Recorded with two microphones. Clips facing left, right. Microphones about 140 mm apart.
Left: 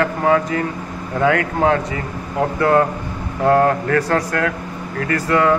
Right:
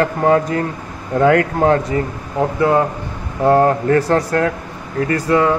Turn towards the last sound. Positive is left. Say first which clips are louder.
# right 1 dB
turn(degrees=-20)  # may be behind; listen again after turning